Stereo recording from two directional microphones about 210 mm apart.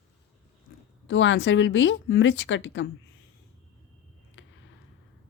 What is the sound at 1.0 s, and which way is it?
A woman's voice, 60° left (ahead or behind).